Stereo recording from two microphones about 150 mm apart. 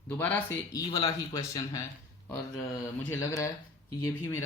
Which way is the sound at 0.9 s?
25° left (ahead or behind).